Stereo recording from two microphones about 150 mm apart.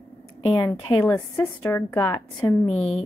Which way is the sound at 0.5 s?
20° left (ahead or behind).